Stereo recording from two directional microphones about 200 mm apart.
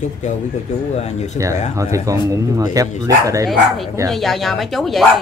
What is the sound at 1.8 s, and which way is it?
Speech, 15° right (ahead or behind).